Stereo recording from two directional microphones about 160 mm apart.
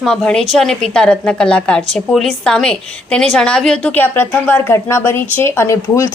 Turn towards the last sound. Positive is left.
turn(degrees=20)  # may be behind; listen again after turning